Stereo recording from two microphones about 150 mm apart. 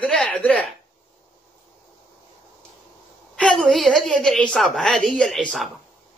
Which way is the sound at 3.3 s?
5° left (ahead or behind).